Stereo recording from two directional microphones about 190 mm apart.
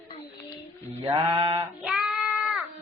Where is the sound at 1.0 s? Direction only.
25° right (ahead or behind).